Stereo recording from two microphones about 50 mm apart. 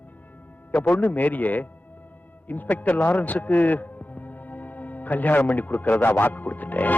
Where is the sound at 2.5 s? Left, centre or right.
Left.